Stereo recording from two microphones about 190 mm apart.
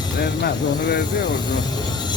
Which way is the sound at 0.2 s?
55° left (ahead or behind).